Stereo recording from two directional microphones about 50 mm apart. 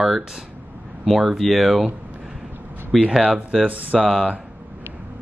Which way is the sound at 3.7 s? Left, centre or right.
Right.